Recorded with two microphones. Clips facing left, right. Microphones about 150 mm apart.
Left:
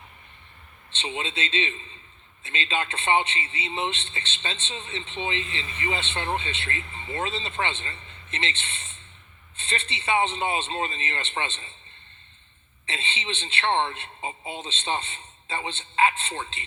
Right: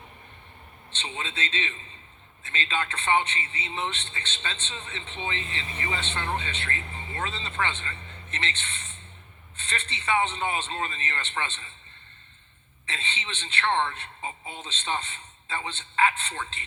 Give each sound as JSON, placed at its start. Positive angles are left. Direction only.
{"t": 1.0, "sound": "a man's voice", "side_deg": 20}
{"t": 12.9, "sound": "a man's voice", "side_deg": 25}